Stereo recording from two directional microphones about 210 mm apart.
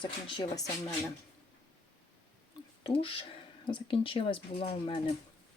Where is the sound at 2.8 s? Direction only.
25° left (ahead or behind).